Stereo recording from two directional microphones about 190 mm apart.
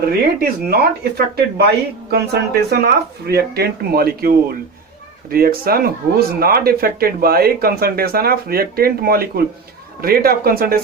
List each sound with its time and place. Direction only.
0.0 s speech: 55° right (ahead or behind)
5.3 s speech: 50° right (ahead or behind)